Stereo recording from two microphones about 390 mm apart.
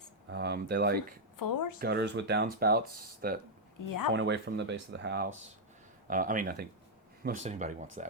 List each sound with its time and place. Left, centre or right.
0.3 s speech: right
1.4 s speech: left
1.8 s speech: right
3.8 s speech: left
4.1 s speech: right